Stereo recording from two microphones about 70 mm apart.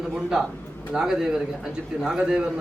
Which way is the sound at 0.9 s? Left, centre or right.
Centre.